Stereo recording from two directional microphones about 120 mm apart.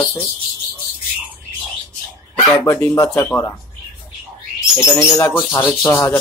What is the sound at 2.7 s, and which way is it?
Speech, 25° left (ahead or behind).